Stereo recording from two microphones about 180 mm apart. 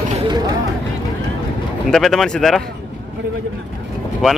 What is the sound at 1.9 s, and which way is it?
Speech, centre (ahead or behind).